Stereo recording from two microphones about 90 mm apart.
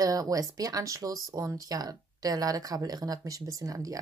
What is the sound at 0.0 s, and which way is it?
Speech, 40° right (ahead or behind).